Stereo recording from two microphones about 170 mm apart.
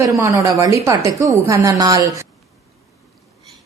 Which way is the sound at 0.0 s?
20° right (ahead or behind).